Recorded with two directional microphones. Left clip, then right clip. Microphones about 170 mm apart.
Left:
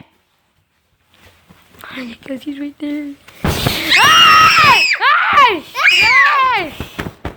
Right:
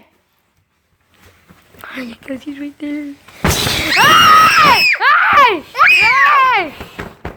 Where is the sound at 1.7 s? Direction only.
5° right (ahead or behind).